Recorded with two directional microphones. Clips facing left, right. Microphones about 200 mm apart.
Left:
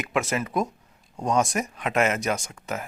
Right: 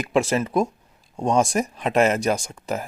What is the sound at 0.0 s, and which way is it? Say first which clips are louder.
Speech: right 5 dB; 30° right (ahead or behind).